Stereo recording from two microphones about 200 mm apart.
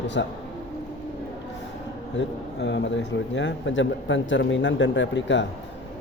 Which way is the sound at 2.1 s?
60° left (ahead or behind).